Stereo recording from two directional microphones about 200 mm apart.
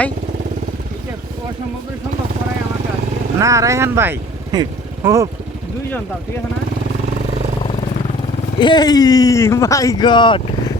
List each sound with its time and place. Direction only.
3.3 s speech: 15° right (ahead or behind)
8.5 s speech: 20° left (ahead or behind)